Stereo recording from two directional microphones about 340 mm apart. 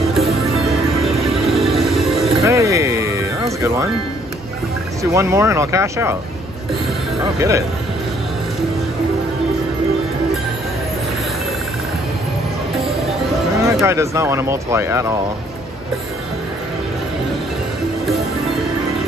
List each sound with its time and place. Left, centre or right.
0.2 s music: centre
2.2 s music: centre
5.1 s speech: centre
7.3 s speech: centre
13.7 s speech: centre